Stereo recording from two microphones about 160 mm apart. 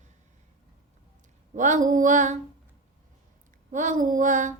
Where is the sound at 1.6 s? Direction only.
55° right (ahead or behind).